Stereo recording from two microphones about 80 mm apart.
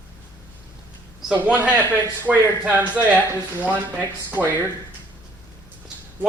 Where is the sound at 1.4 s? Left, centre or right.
Centre.